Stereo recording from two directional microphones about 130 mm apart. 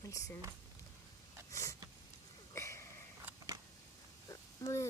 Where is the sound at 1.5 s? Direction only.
25° left (ahead or behind).